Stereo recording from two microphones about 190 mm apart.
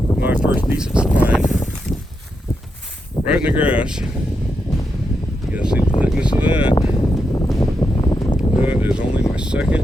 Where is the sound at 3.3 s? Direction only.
5° right (ahead or behind).